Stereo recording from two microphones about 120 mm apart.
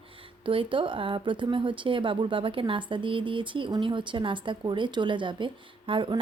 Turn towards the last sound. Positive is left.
turn(degrees=-45)  # may be behind; listen again after turning